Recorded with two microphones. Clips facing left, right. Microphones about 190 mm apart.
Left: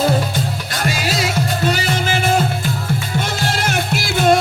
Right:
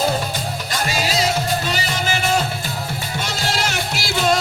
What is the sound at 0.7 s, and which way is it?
Music, 50° left (ahead or behind).